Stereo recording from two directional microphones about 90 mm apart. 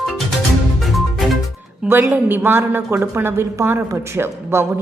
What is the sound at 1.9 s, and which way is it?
Speech, 25° right (ahead or behind).